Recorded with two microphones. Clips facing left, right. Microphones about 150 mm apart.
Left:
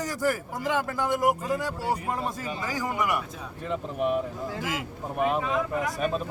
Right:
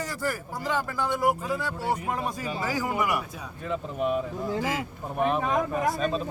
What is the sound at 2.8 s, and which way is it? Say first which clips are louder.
Speech: left 1 dB; 20° right (ahead or behind).